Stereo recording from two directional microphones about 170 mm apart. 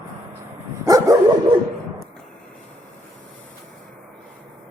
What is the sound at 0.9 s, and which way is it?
Dog, 20° right (ahead or behind).